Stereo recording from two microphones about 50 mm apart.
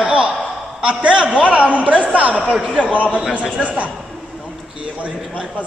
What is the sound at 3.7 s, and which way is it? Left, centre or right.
Speech, right.